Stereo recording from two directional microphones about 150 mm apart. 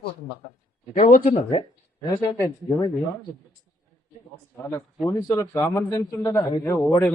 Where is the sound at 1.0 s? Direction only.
60° left (ahead or behind).